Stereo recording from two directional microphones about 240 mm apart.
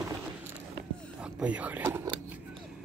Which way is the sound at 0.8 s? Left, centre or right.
Right.